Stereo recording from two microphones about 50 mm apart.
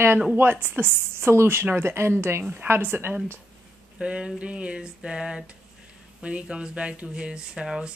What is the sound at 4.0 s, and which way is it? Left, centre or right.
Speech, centre.